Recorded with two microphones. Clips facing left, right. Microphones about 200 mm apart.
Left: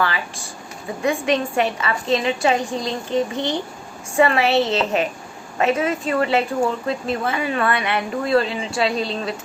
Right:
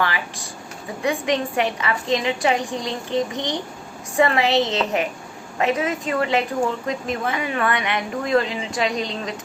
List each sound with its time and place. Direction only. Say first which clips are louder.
1.0 s speech: left 2 dB; 15° right (ahead or behind)